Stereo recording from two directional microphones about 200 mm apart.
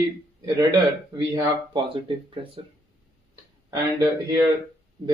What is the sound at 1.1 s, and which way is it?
Speech, 20° right (ahead or behind).